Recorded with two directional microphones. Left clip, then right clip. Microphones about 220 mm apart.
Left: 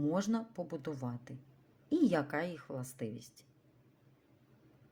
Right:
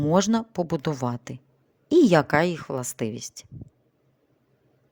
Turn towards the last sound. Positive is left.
turn(degrees=-45)  # may be behind; listen again after turning